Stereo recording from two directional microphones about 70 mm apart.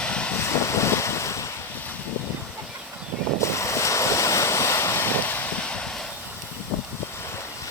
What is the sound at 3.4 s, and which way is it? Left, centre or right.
Waves, left.